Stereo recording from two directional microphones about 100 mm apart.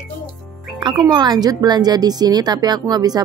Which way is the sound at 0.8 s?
45° right (ahead or behind).